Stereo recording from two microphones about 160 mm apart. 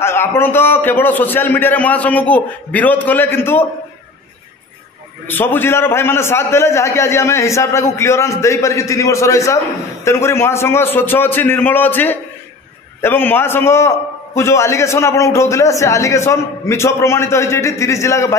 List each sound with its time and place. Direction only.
0.0 s a man's voice: 15° left (ahead or behind)
5.2 s a man's voice: 10° left (ahead or behind)